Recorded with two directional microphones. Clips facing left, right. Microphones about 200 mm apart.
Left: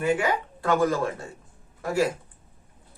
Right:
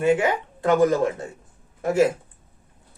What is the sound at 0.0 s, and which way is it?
Speech, 20° right (ahead or behind).